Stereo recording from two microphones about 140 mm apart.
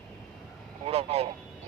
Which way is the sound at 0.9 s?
45° right (ahead or behind).